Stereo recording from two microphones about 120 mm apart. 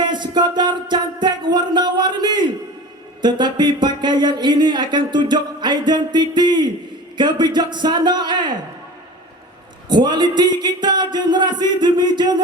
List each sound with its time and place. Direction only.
0.0 s music: 40° right (ahead or behind)
9.9 s music: 40° right (ahead or behind)